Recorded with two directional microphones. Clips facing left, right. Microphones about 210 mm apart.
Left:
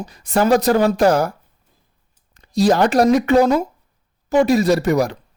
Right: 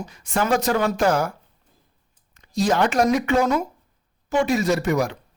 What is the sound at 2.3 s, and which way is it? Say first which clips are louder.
Speech: left 5 dB; 35° left (ahead or behind).